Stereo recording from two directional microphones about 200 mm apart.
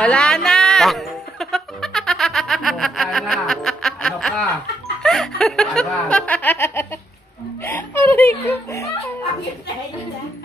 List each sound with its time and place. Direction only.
0.0 s music: 5° left (ahead or behind)
5.0 s snicker: centre (ahead or behind)
7.6 s chuckle: 10° left (ahead or behind)